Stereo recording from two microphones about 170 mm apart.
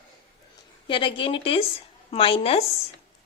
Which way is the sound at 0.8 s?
30° left (ahead or behind).